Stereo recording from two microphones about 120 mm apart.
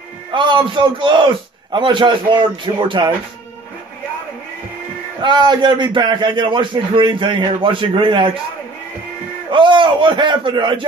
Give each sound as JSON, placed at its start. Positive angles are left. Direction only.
{"t": 0.3, "sound": "a man's voice", "side_deg": -40}
{"t": 5.2, "sound": "a man's voice", "side_deg": -40}
{"t": 9.5, "sound": "a man's voice", "side_deg": -45}